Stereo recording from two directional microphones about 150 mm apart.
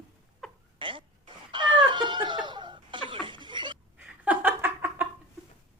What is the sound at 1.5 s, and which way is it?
Cat, 30° right (ahead or behind).